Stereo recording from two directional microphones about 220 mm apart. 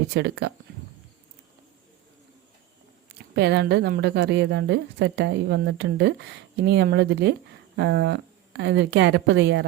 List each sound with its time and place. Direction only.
0.1 s a woman's voice: 50° right (ahead or behind)
3.3 s a woman's voice: 50° right (ahead or behind)